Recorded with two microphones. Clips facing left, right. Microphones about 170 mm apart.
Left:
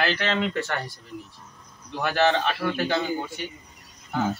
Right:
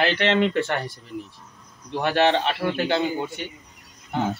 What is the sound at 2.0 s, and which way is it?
Speech, 25° right (ahead or behind).